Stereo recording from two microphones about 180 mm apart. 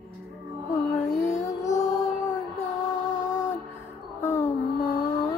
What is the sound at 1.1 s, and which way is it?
Music, 40° left (ahead or behind).